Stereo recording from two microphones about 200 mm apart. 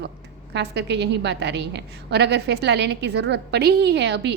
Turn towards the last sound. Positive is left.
turn(degrees=-60)  # may be behind; listen again after turning